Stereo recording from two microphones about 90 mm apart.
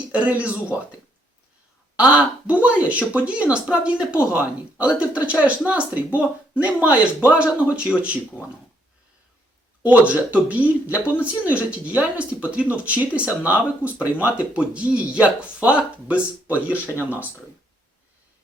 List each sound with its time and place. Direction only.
0.1 s speech: 15° right (ahead or behind)
2.0 s speech: 15° right (ahead or behind)
9.8 s speech: 15° right (ahead or behind)